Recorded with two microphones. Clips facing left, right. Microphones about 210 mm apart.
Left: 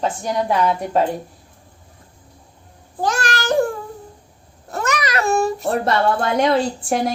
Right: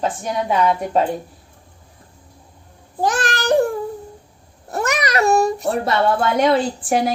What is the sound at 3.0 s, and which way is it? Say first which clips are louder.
Babbling: right 1 dB; 20° right (ahead or behind).